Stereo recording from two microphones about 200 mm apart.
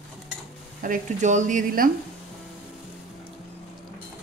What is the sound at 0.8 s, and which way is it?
Speech, 40° right (ahead or behind).